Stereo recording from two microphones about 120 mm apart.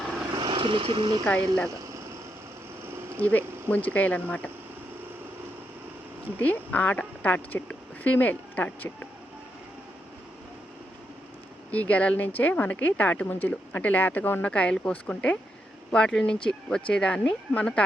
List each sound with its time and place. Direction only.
0.3 s vehicle: 40° right (ahead or behind)
3.2 s a woman's voice: 15° left (ahead or behind)
6.4 s a woman's voice: 15° left (ahead or behind)
11.7 s a woman's voice: 10° left (ahead or behind)